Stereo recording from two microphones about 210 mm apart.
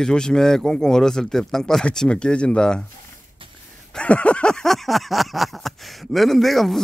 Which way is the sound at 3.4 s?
25° right (ahead or behind).